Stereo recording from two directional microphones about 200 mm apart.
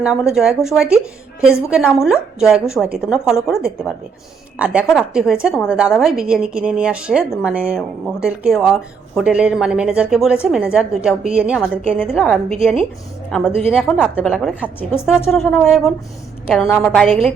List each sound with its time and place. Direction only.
0.0 s a woman's voice: 5° right (ahead or behind)
1.7 s a woman's voice: 5° right (ahead or behind)